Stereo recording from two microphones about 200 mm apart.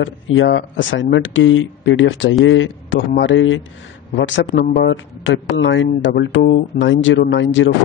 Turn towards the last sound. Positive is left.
turn(degrees=70)  # may be behind; listen again after turning